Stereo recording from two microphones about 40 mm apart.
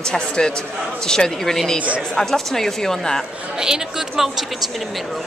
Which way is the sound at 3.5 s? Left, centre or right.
Centre.